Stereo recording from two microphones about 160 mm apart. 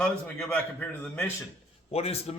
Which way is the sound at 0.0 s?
5° left (ahead or behind).